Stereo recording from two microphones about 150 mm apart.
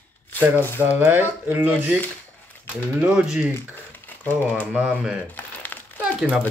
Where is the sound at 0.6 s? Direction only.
15° left (ahead or behind).